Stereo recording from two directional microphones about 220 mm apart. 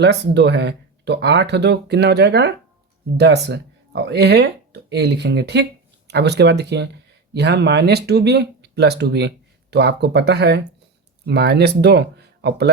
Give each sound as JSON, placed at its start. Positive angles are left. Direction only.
{"t": 0.0, "sound": "speech", "side_deg": -50}